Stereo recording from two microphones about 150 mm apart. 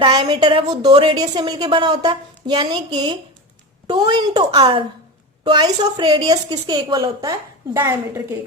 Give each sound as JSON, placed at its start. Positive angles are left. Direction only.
{"t": 0.0, "sound": "a woman's voice", "side_deg": -30}